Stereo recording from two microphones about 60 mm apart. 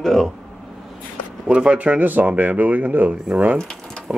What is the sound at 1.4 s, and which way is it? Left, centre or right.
Speech, centre.